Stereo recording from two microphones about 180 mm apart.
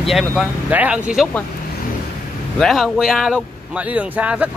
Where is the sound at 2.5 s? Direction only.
Centre (ahead or behind).